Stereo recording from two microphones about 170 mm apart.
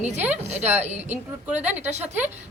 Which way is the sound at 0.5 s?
10° right (ahead or behind).